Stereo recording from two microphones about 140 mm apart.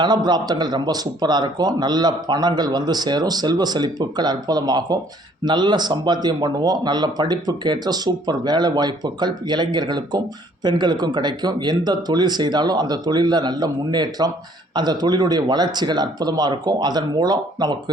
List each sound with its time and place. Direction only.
0.0 s speech: 30° right (ahead or behind)